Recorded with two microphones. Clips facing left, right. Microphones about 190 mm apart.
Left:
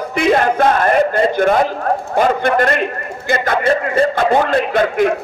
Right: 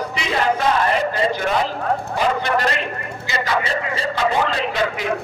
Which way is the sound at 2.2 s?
50° left (ahead or behind).